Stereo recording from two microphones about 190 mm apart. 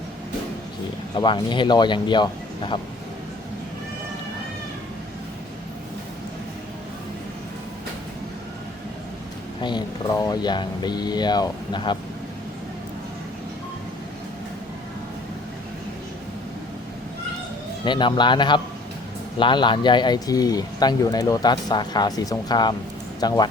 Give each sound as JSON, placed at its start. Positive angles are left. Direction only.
{"t": 1.1, "sound": "speech", "side_deg": 25}
{"t": 9.6, "sound": "speech", "side_deg": 25}
{"t": 17.8, "sound": "speech", "side_deg": 25}